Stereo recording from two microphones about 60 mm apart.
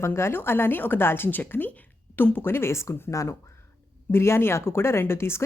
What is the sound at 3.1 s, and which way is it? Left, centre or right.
Speech, left.